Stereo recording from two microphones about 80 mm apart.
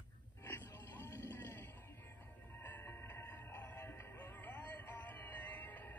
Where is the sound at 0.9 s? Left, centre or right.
Left.